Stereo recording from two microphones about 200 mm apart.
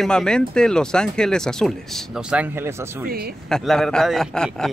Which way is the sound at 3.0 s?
50° right (ahead or behind).